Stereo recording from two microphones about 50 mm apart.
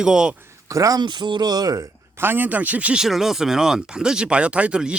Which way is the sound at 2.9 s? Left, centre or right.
Centre.